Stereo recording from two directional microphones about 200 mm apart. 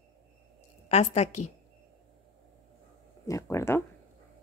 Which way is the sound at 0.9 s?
35° left (ahead or behind).